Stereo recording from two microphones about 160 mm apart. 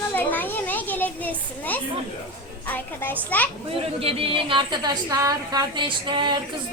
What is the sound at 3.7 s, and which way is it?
A woman's voice, 35° right (ahead or behind).